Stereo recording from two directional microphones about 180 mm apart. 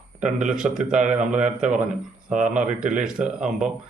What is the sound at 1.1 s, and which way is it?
Speech, 40° right (ahead or behind).